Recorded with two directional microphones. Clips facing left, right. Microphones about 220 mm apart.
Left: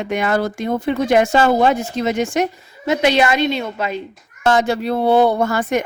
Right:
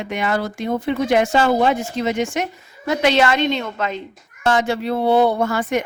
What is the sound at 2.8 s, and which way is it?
A woman's voice, 15° left (ahead or behind).